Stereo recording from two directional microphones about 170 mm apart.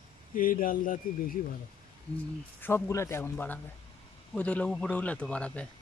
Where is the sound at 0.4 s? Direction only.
55° left (ahead or behind).